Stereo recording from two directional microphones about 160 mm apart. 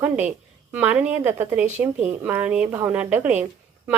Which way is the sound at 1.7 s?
45° right (ahead or behind).